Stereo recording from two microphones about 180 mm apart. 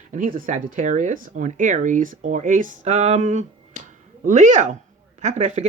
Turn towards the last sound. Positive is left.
turn(degrees=-40)  # may be behind; listen again after turning